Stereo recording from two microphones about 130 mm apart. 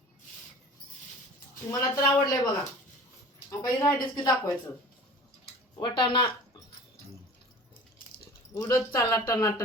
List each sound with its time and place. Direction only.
1.8 s speech: 30° left (ahead or behind)
3.5 s speech: 30° left (ahead or behind)
5.8 s speech: 40° left (ahead or behind)
8.5 s speech: 25° left (ahead or behind)